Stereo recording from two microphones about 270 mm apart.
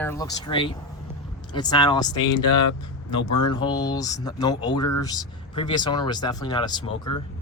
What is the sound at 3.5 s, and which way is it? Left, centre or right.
Speech, centre.